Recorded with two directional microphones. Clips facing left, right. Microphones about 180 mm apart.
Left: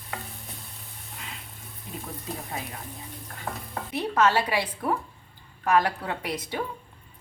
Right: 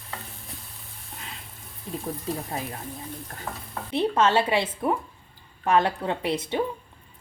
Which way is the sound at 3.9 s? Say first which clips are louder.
Right 2 dB; 25° right (ahead or behind).